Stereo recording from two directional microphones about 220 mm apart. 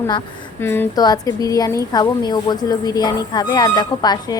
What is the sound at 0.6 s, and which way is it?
Speech, 10° left (ahead or behind).